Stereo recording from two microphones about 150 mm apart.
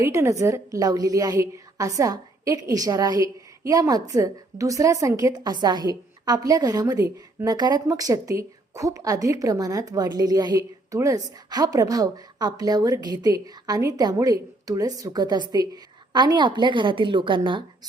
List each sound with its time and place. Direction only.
0.0 s a woman's voice: 20° right (ahead or behind)